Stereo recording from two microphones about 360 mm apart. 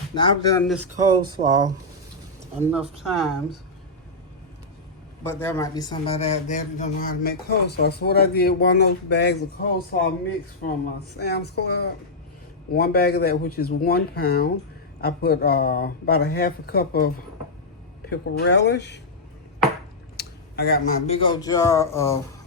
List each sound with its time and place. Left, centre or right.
0.1 s speech: centre
5.2 s a man's voice: centre; by 10.1 s left
11.2 s a man's voice: left
18.1 s a man's voice: left
20.1 s speech: left; by 22.2 s centre